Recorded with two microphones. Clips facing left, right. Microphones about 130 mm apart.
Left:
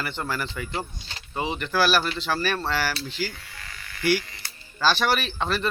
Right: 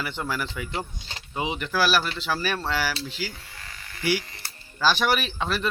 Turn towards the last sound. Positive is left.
turn(degrees=-5)  # may be behind; listen again after turning